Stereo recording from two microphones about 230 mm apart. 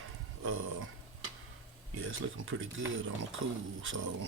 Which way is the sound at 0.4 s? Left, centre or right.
Right.